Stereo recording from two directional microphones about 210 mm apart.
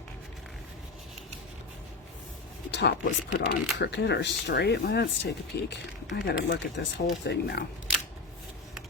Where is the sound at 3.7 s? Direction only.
55° left (ahead or behind).